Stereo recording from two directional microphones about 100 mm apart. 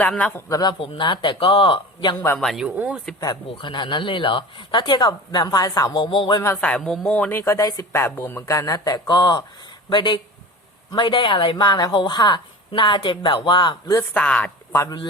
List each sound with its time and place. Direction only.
0.0 s speech: 15° left (ahead or behind)
0.8 s speech: 55° left (ahead or behind)
2.4 s speech: centre (ahead or behind)
2.6 s speech: 10° right (ahead or behind)
3.6 s a woman's voice: 55° left (ahead or behind)
6.6 s speech: 10° left (ahead or behind)
7.3 s speech: 25° left (ahead or behind)
7.6 s a man's voice: 40° left (ahead or behind)
7.9 s a man's voice: 25° left (ahead or behind); by 14.0 s 45° left (ahead or behind)
14.1 s speech: 15° left (ahead or behind)
14.7 s speech: 35° left (ahead or behind)